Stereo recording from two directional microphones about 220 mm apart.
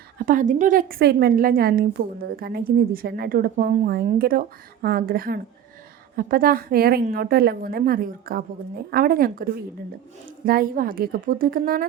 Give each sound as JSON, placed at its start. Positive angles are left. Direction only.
{"t": 0.3, "sound": "a woman's voice", "side_deg": -35}